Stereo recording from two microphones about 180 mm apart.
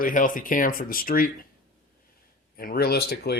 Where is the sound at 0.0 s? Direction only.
50° left (ahead or behind).